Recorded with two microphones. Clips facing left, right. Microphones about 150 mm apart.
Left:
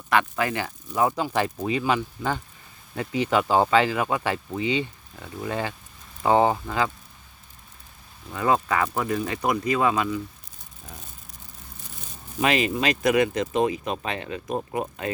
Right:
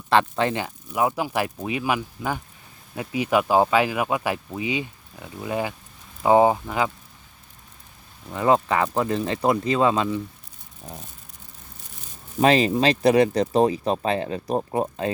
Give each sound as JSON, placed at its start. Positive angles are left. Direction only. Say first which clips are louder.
{"t": 0.1, "sound": "speech", "louder": "right 3 dB", "side_deg": -30}
{"t": 8.3, "sound": "speech", "louder": "right 3 dB", "side_deg": -20}
{"t": 12.4, "sound": "speech", "louder": "right 5 dB", "side_deg": -35}